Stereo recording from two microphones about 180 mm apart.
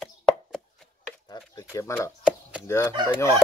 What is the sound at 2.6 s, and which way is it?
Speech, 15° left (ahead or behind).